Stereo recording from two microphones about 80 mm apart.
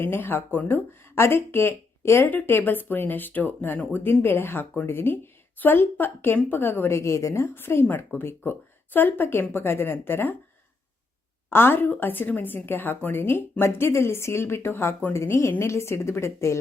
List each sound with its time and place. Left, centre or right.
0.0 s speech: left
11.4 s a woman's voice: left